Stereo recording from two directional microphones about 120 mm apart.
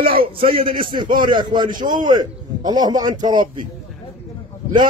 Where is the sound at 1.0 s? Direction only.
90° right.